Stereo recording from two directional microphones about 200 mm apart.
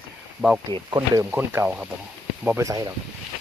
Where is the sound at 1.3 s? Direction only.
10° right (ahead or behind).